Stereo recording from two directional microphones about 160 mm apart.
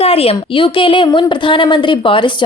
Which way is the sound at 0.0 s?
40° left (ahead or behind).